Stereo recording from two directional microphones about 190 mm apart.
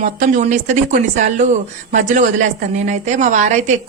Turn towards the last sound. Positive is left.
turn(degrees=-40)  # may be behind; listen again after turning